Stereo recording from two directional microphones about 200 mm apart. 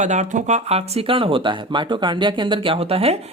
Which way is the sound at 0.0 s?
35° right (ahead or behind).